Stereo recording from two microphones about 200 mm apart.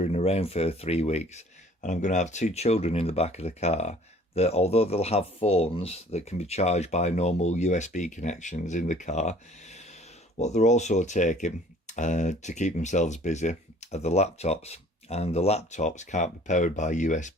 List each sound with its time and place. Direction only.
0.0 s speech: 30° left (ahead or behind)